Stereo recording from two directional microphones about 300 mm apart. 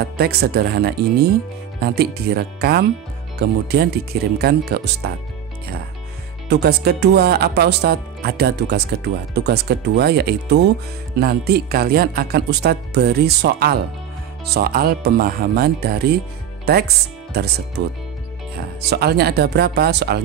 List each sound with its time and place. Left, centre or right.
0.0 s speech: right
6.5 s speech: right